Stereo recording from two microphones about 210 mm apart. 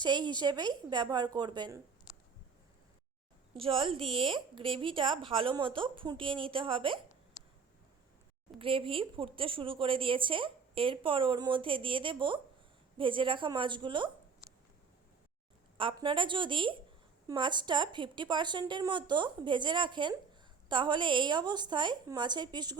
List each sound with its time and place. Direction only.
0.0 s speech: 20° right (ahead or behind)
3.5 s speech: 25° right (ahead or behind)
8.5 s speech: 25° right (ahead or behind)
15.8 s speech: 25° right (ahead or behind)